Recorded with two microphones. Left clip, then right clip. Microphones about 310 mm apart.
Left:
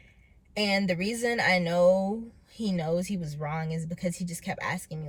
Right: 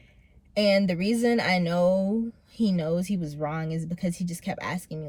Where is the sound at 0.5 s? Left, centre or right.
Centre.